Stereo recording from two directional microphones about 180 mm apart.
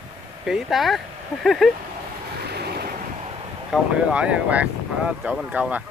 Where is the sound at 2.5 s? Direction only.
65° right (ahead or behind).